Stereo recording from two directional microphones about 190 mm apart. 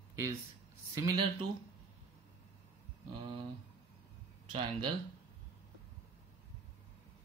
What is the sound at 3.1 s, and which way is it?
Speech, 25° right (ahead or behind).